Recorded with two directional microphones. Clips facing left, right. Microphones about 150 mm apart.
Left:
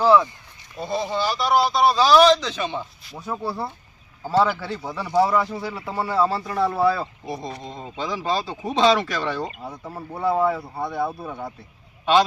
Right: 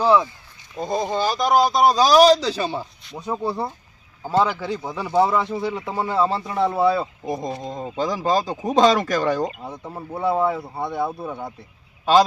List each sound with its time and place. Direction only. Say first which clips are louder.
0.0 s speech: left 1 dB; 15° right (ahead or behind)
0.8 s speech: right 2 dB; 45° right (ahead or behind)
3.2 s speech: right 3 dB; 20° right (ahead or behind)
7.7 s speech: right 5 dB; 45° right (ahead or behind)
9.6 s speech: right 1 dB; 20° right (ahead or behind)